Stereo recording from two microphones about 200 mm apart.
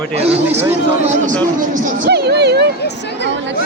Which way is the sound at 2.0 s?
55° right (ahead or behind).